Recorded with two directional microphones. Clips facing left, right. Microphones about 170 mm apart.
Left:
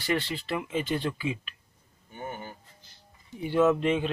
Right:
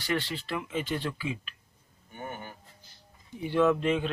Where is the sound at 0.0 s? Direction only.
5° left (ahead or behind).